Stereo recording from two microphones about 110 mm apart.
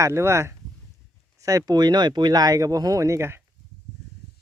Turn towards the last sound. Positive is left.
turn(degrees=-25)  # may be behind; listen again after turning